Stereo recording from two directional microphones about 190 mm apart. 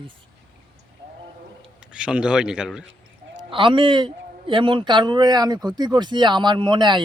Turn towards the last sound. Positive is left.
turn(degrees=-25)  # may be behind; listen again after turning